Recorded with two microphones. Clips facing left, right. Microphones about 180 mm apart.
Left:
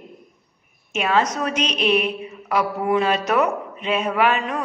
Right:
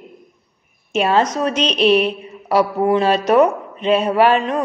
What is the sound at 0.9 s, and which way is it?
A woman's voice, 30° right (ahead or behind).